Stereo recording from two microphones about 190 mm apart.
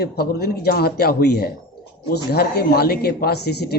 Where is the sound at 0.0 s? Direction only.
55° left (ahead or behind).